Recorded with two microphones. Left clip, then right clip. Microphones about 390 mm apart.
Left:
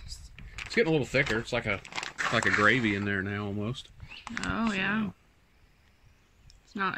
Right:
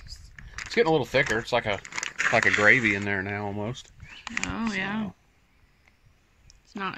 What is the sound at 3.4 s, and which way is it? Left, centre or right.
Speech, right.